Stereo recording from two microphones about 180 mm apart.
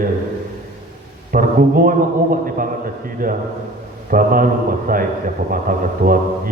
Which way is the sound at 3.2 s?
55° right (ahead or behind).